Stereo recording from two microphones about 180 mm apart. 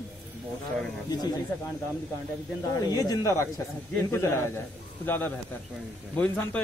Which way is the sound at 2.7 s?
20° left (ahead or behind).